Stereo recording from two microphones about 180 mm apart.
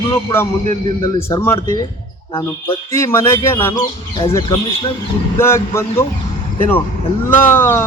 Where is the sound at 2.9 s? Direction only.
15° left (ahead or behind).